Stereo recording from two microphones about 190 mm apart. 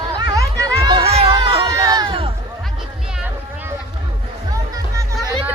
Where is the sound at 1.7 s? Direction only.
20° right (ahead or behind).